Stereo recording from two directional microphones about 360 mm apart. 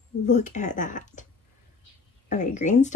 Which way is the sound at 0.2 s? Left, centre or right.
Centre.